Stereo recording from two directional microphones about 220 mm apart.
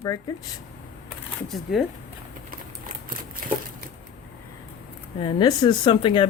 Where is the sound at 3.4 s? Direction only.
40° right (ahead or behind).